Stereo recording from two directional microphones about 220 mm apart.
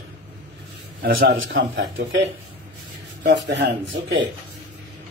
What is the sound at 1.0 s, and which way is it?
Speech, 50° right (ahead or behind).